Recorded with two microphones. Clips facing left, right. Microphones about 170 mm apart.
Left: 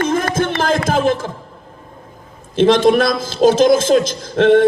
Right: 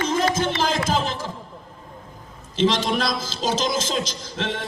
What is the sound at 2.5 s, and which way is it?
A man's voice, 55° left (ahead or behind).